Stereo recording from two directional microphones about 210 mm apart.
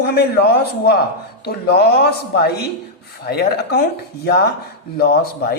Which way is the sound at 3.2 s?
50° left (ahead or behind).